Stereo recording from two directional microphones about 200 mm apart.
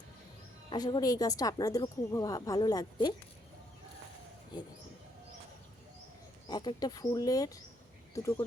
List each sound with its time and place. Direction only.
0.7 s speech: 20° left (ahead or behind)
6.5 s speech: 20° left (ahead or behind)